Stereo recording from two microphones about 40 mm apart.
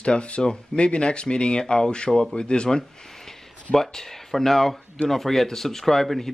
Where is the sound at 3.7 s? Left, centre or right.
Centre.